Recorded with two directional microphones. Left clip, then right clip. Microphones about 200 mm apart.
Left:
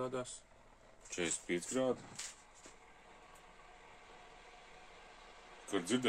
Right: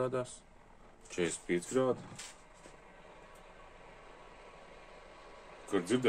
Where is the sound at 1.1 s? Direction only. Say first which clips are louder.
Right 4 dB; centre (ahead or behind).